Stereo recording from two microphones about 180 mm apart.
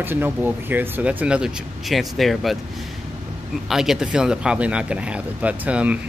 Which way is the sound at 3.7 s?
Centre (ahead or behind).